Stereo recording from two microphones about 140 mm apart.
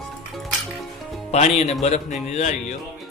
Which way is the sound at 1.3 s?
55° left (ahead or behind).